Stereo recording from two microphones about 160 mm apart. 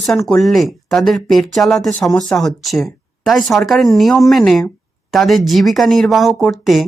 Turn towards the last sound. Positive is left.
turn(degrees=0)  # may be behind; listen again after turning